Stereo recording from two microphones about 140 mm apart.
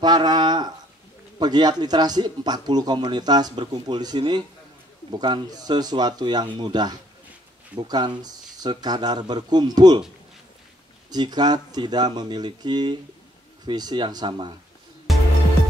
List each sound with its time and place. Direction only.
0.0 s a sound: 30° right (ahead or behind)
1.4 s speech: 30° right (ahead or behind)
11.1 s speech: 30° right (ahead or behind)
15.1 s music: centre (ahead or behind)